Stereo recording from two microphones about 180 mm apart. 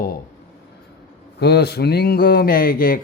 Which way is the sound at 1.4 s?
65° left (ahead or behind).